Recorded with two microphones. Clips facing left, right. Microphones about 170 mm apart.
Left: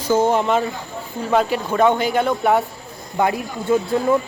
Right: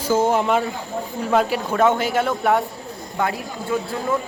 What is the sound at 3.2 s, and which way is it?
Speech, 15° left (ahead or behind).